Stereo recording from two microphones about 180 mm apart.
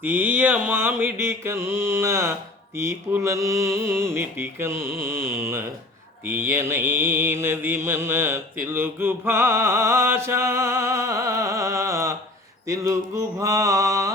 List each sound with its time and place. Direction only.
0.0 s mantra: 10° right (ahead or behind)